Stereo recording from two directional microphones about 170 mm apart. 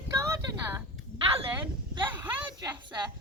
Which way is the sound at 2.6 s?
25° right (ahead or behind).